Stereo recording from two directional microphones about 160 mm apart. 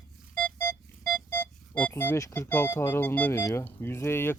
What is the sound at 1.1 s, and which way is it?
Speech, 5° left (ahead or behind).